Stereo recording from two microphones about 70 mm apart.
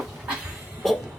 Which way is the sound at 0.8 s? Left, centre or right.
Centre.